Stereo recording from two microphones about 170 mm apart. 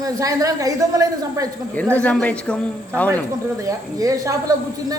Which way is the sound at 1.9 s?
5° left (ahead or behind).